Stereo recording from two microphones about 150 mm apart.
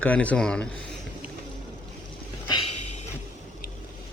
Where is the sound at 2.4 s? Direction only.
45° left (ahead or behind).